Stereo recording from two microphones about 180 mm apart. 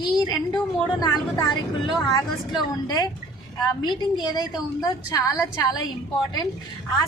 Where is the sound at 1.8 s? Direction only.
25° left (ahead or behind).